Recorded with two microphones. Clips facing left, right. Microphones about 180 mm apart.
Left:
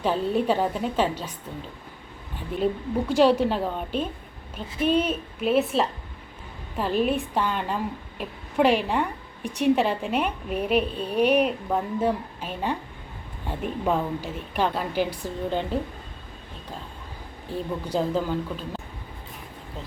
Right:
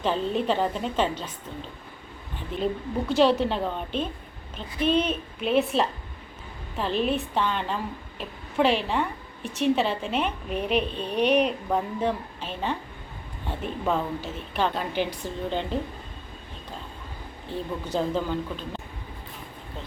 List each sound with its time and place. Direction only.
0.0 s a woman's voice: 10° left (ahead or behind)
3.1 s a woman's voice: 10° left (ahead or behind)
17.5 s a woman's voice: 10° left (ahead or behind)